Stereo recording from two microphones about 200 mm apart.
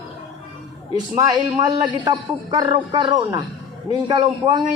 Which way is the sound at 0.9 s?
20° right (ahead or behind).